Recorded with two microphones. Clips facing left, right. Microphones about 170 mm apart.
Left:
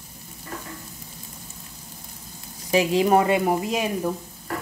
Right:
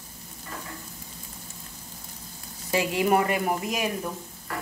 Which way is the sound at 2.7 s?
20° left (ahead or behind).